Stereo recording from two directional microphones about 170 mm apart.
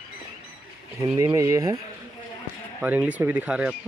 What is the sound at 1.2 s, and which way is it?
Speech, 20° right (ahead or behind).